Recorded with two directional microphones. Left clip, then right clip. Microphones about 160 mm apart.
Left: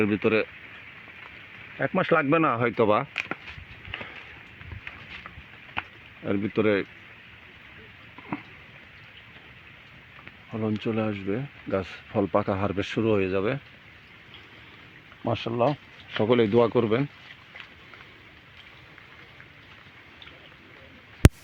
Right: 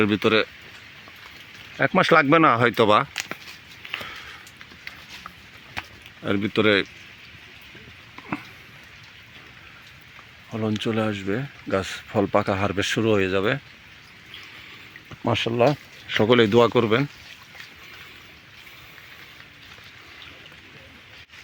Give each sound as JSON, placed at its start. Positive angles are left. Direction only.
{"t": 0.0, "sound": "speech", "side_deg": -5}
{"t": 1.8, "sound": "speech", "side_deg": -25}
{"t": 2.7, "sound": "speech", "side_deg": 0}
{"t": 6.2, "sound": "speech", "side_deg": -10}
{"t": 8.3, "sound": "a sound", "side_deg": 0}
{"t": 10.6, "sound": "speech", "side_deg": -5}
{"t": 15.3, "sound": "speech", "side_deg": -20}
{"t": 16.3, "sound": "speech", "side_deg": -10}